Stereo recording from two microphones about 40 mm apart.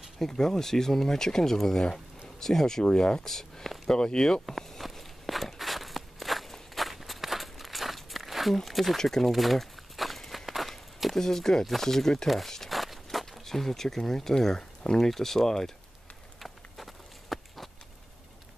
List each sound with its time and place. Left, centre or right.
0.2 s speech: centre
3.3 s speech: centre
4.5 s walk: centre
8.5 s speech: centre
9.3 s walk: centre
11.6 s speech: centre
12.3 s a sound: centre
15.0 s speech: centre
16.3 s a sound: centre